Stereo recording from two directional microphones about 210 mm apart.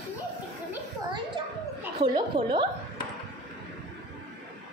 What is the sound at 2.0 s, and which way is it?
Speech, 20° right (ahead or behind).